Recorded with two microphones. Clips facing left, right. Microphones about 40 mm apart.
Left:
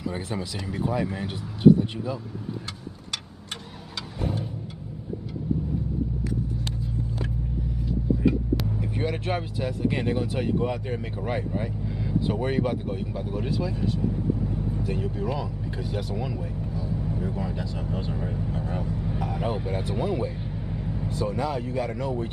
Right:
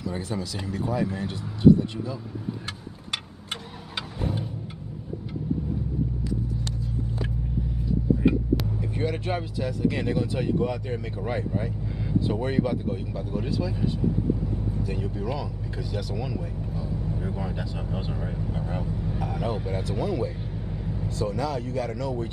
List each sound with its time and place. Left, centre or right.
0.1 s speech: centre
8.5 s vehicle: centre
9.8 s speech: left
14.4 s vehicle: centre
15.8 s speech: left
16.9 s vehicle: centre
17.2 s speech: centre
20.7 s vehicle: centre
21.2 s speech: centre